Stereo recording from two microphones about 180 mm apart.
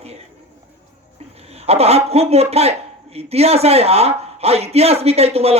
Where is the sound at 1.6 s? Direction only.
35° right (ahead or behind).